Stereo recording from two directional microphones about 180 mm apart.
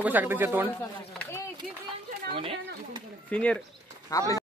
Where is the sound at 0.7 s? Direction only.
10° left (ahead or behind).